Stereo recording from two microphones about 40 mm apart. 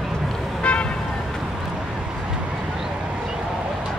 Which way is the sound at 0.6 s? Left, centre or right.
Left.